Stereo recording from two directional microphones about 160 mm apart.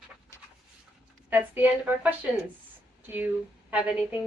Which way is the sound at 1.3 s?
10° right (ahead or behind).